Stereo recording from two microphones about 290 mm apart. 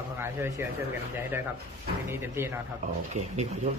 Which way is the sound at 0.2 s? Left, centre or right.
Centre.